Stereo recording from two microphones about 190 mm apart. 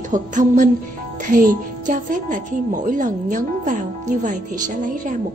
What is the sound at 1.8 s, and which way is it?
A woman's voice, 45° right (ahead or behind).